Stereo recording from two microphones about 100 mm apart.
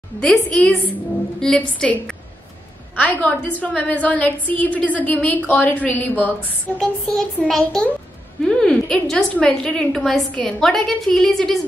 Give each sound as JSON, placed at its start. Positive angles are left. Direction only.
{"t": 0.2, "sound": "a woman's voice", "side_deg": 10}
{"t": 6.8, "sound": "a woman's voice", "side_deg": 5}